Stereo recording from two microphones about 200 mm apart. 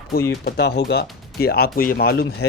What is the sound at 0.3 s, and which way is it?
Speech, 55° left (ahead or behind).